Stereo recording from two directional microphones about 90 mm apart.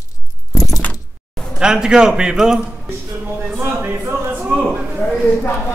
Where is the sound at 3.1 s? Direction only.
15° right (ahead or behind).